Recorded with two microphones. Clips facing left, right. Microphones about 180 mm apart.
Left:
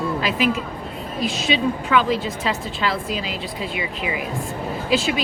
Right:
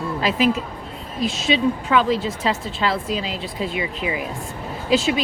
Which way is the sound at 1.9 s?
30° right (ahead or behind).